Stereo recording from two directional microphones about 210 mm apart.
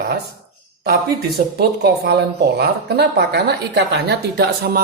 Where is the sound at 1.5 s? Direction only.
50° right (ahead or behind).